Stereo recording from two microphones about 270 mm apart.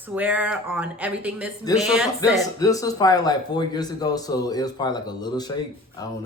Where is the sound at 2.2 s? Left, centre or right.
Centre.